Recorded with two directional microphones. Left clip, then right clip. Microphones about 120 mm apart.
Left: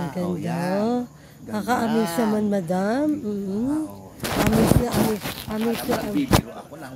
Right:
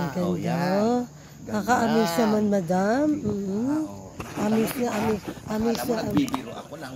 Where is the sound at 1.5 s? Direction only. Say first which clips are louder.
Right 1 dB; 20° left (ahead or behind).